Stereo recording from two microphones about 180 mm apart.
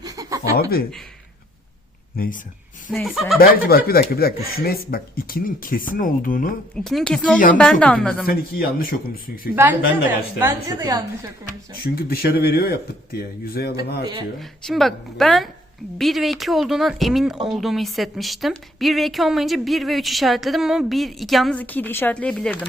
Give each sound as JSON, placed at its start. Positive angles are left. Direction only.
{"t": 0.0, "sound": "chuckle", "side_deg": -20}
{"t": 0.5, "sound": "speech", "side_deg": 55}
{"t": 2.1, "sound": "speech", "side_deg": 50}
{"t": 2.9, "sound": "speech", "side_deg": 0}
{"t": 3.4, "sound": "speech", "side_deg": 55}
{"t": 6.7, "sound": "speech", "side_deg": 5}
{"t": 8.3, "sound": "speech", "side_deg": 55}
{"t": 10.4, "sound": "a woman's voice", "side_deg": -20}
{"t": 11.8, "sound": "speech", "side_deg": 60}
{"t": 14.0, "sound": "a woman's voice", "side_deg": -25}
{"t": 14.3, "sound": "speech", "side_deg": 0}